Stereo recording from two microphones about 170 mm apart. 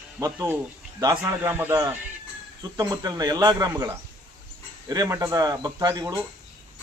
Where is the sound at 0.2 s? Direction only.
15° right (ahead or behind).